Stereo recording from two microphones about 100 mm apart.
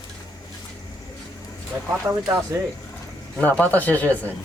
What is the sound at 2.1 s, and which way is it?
Speech, 25° right (ahead or behind).